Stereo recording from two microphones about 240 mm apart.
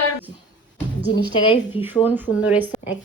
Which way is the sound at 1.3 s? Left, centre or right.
Left.